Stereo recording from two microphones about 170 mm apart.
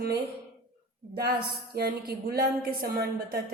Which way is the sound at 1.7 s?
70° right (ahead or behind).